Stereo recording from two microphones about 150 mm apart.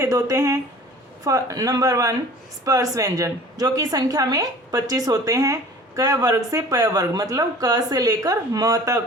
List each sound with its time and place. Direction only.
0.0 s speech: 25° right (ahead or behind)